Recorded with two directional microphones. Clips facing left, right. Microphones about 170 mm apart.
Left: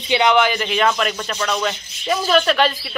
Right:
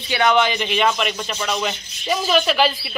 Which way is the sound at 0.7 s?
5° right (ahead or behind).